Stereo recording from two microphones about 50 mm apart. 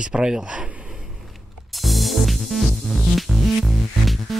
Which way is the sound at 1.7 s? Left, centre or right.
Centre.